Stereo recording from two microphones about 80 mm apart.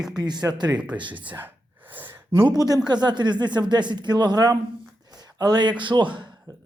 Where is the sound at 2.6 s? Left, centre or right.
Right.